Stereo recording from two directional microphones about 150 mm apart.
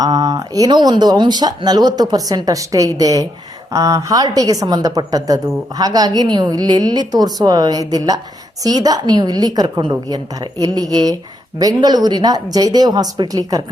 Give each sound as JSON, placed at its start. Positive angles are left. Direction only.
{"t": 0.0, "sound": "a woman's voice", "side_deg": -25}